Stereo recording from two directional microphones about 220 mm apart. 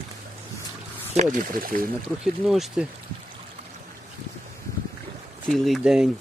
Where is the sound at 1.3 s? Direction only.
40° right (ahead or behind).